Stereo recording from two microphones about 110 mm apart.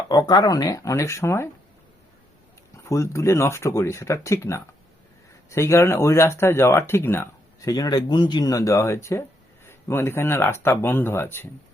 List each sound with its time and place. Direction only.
0.1 s speech: 35° left (ahead or behind)
2.7 s speech: 25° left (ahead or behind)